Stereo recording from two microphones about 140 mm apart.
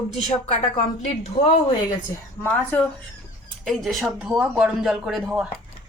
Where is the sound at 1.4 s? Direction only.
60° left (ahead or behind).